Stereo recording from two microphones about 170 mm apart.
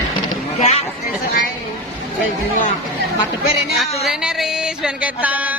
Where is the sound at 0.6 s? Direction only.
40° left (ahead or behind).